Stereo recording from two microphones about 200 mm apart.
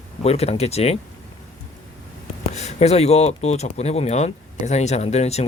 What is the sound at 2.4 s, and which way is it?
Speech, 35° left (ahead or behind).